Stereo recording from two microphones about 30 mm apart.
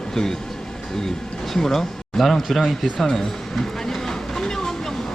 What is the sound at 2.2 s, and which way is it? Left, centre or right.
Speech, centre.